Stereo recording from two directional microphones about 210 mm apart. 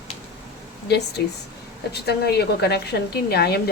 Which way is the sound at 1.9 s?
50° left (ahead or behind).